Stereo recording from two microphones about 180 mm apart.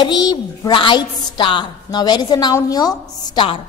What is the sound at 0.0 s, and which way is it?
A woman's voice, 25° left (ahead or behind).